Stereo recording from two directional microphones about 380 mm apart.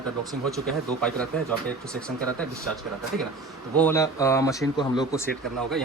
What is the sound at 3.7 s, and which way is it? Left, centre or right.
Speech, centre.